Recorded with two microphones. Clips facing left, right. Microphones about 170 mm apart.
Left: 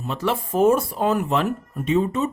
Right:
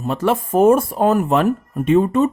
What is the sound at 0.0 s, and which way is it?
Speech, 50° right (ahead or behind).